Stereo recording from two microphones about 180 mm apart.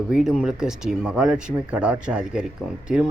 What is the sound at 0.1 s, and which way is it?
A man's voice, 5° right (ahead or behind).